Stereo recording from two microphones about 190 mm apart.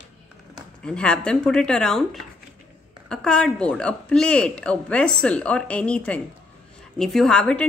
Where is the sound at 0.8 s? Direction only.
5° left (ahead or behind).